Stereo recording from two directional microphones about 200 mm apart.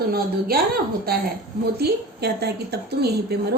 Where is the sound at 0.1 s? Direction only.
50° right (ahead or behind).